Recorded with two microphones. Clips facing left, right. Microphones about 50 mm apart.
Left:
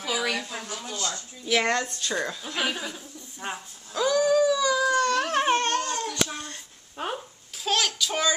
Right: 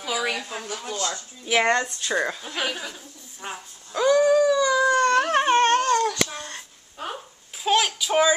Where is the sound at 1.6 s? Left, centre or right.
Centre.